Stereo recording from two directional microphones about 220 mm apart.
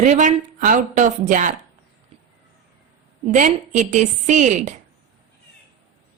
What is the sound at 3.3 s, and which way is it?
A woman's voice, 35° right (ahead or behind).